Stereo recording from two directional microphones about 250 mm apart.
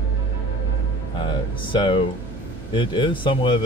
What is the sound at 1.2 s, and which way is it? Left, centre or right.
Speech, centre.